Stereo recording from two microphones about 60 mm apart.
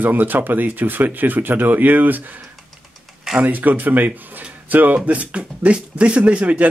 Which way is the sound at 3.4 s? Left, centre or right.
Right.